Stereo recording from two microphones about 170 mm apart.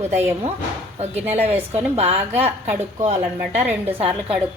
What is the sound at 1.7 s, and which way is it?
A woman's voice, 40° right (ahead or behind).